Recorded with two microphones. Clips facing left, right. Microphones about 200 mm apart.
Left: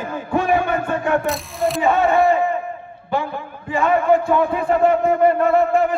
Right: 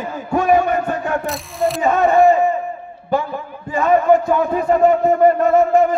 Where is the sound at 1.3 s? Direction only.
Centre (ahead or behind).